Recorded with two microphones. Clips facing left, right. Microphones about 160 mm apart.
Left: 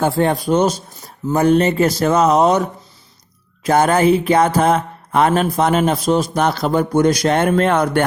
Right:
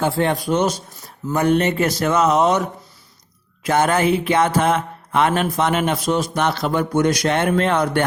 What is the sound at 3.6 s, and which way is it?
Speech, 35° left (ahead or behind).